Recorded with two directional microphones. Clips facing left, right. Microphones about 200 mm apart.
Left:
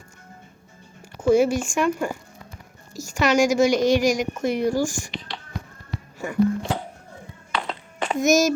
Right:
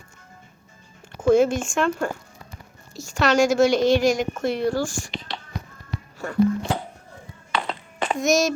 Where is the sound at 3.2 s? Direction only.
15° left (ahead or behind).